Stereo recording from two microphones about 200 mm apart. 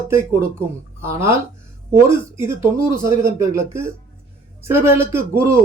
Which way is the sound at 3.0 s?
15° right (ahead or behind).